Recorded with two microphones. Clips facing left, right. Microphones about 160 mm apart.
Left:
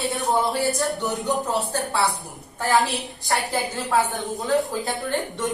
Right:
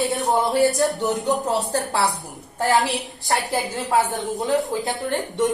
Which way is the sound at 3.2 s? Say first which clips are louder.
Right 1 dB; 20° right (ahead or behind).